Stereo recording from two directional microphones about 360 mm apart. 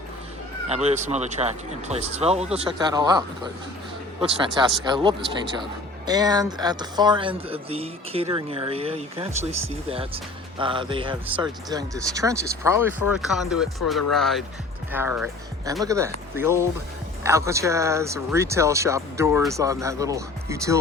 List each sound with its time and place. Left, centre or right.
0.7 s speech: centre
4.8 s speech: centre